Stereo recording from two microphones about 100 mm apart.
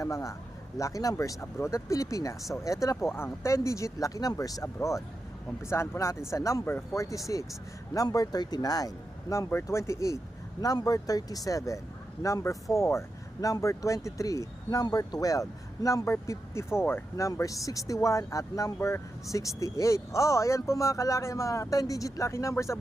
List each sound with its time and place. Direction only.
0.0 s speech: 35° left (ahead or behind)
9.5 s speech: 25° left (ahead or behind)